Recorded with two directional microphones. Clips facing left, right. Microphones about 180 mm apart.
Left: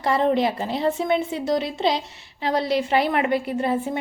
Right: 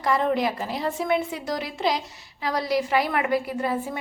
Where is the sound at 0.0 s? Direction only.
25° left (ahead or behind).